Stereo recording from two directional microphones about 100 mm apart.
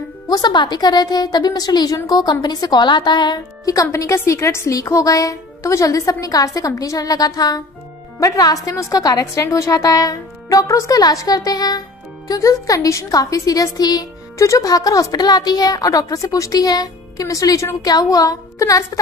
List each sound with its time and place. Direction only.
0.3 s a woman's voice: 45° left (ahead or behind)